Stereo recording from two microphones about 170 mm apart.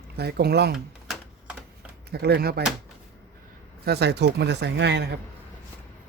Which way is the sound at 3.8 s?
80° right.